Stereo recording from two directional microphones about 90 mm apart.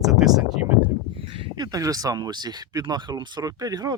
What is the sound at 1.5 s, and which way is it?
Speech, 45° right (ahead or behind).